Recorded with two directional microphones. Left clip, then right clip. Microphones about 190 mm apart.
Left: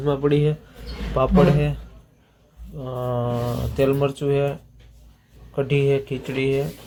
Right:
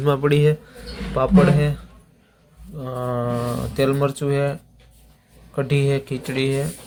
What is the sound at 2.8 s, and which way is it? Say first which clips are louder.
Speech: right 1 dB; 10° right (ahead or behind).